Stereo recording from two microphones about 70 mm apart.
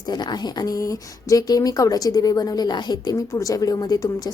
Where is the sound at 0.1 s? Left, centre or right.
Left.